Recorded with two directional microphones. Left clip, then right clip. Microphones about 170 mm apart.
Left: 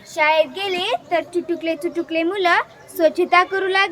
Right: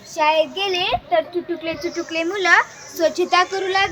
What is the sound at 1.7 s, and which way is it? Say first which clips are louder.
A child's voice: left 2 dB; 50° left (ahead or behind).